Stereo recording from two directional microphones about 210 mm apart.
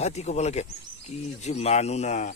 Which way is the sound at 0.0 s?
30° left (ahead or behind).